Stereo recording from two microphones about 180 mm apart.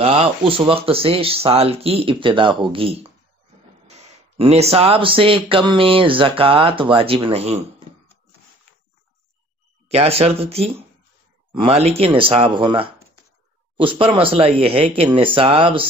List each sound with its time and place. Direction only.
0.0 s speech: 30° right (ahead or behind)
9.8 s speech: 35° right (ahead or behind)